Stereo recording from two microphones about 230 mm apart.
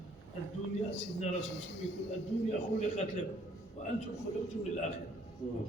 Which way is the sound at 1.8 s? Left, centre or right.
Left.